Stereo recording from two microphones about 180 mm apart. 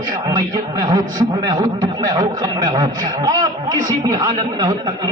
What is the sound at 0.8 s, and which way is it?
A man's voice, 20° right (ahead or behind).